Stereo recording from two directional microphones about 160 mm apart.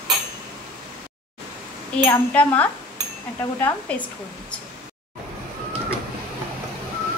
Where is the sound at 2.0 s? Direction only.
10° left (ahead or behind).